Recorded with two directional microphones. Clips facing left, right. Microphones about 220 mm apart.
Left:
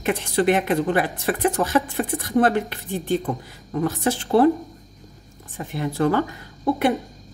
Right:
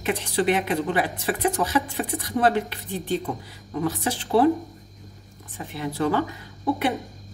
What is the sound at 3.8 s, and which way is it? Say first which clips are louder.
Speech: left 3 dB; 45° left (ahead or behind).